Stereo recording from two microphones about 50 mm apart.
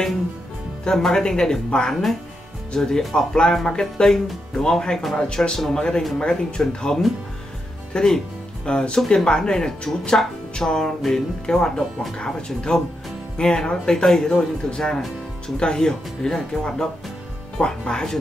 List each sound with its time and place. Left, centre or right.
0.8 s speech: centre